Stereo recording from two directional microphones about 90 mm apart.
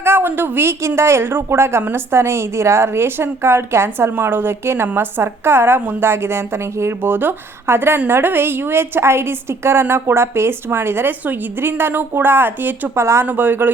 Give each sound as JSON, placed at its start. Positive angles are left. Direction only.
{"t": 0.0, "sound": "a woman's voice", "side_deg": -25}